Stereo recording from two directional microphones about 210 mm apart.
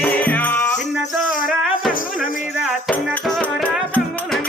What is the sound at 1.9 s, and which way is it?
Speech, 40° left (ahead or behind).